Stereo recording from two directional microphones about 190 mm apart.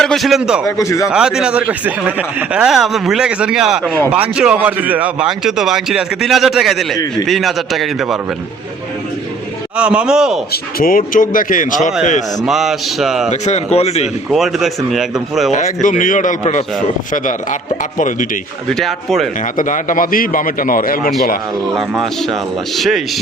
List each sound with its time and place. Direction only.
0.0 s a man's voice: centre (ahead or behind)
0.8 s speech: 15° left (ahead or behind)
1.1 s speech: 5° right (ahead or behind)
9.7 s speech: 5° right (ahead or behind)
10.5 s a man's voice: 50° left (ahead or behind)
12.5 s speech: centre (ahead or behind)
13.3 s speech: 35° left (ahead or behind)
14.3 s speech: centre (ahead or behind)
15.5 s a man's voice: 45° left (ahead or behind)
18.7 s speech: centre (ahead or behind)
19.5 s a man's voice: 45° left (ahead or behind)
21.8 s speech: centre (ahead or behind)